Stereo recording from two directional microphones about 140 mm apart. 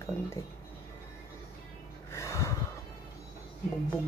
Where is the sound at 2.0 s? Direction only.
20° left (ahead or behind).